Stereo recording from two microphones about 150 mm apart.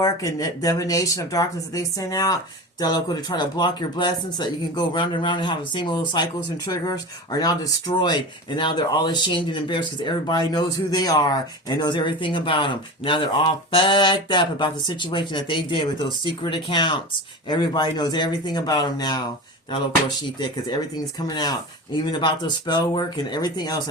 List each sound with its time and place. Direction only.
0.0 s speech: 25° left (ahead or behind)
21.2 s speech: 30° left (ahead or behind)